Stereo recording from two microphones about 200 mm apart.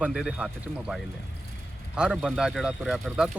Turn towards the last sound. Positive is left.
turn(degrees=-5)  # may be behind; listen again after turning